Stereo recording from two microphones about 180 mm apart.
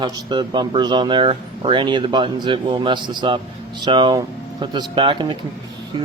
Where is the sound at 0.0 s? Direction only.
25° right (ahead or behind).